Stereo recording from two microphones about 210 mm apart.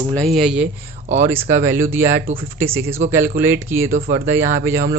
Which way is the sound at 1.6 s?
10° right (ahead or behind).